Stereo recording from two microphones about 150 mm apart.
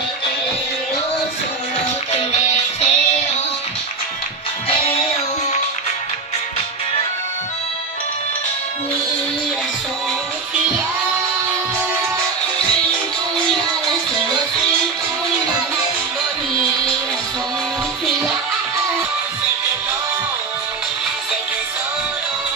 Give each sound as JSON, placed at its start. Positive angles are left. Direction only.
{"t": 2.4, "sound": "music", "side_deg": 50}
{"t": 4.6, "sound": "music", "side_deg": 40}